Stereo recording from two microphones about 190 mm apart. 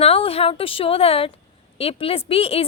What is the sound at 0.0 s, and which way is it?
A woman's voice, 30° left (ahead or behind).